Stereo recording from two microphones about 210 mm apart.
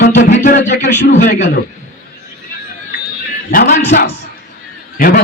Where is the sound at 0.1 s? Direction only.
35° left (ahead or behind).